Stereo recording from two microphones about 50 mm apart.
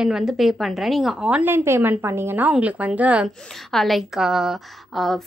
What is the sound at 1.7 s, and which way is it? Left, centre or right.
Speech, right.